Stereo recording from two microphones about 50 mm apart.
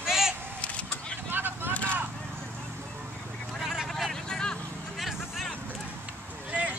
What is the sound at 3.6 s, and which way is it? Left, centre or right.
Vehicle, centre.